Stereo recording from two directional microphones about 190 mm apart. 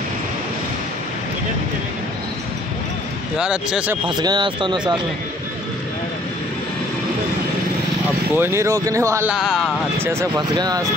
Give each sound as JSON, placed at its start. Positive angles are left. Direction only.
{"t": 3.3, "sound": "speech", "side_deg": -5}
{"t": 4.2, "sound": "speech", "side_deg": -25}
{"t": 8.4, "sound": "speech", "side_deg": -15}